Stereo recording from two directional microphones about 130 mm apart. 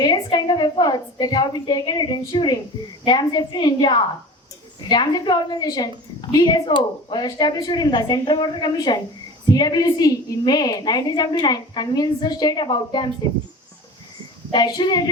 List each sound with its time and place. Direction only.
0.0 s a woman's voice: 35° left (ahead or behind)
14.5 s a woman's voice: 35° left (ahead or behind)